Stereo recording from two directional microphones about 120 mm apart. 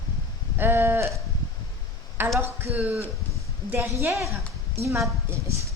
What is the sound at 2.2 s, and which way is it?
A woman's voice, 15° right (ahead or behind).